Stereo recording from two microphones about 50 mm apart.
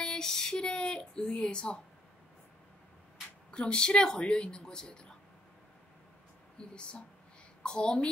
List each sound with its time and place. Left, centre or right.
0.0 s speech: centre
3.5 s speech: centre
6.6 s speech: centre